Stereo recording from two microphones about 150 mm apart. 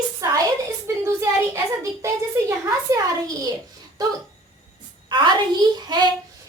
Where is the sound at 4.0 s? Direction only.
25° right (ahead or behind).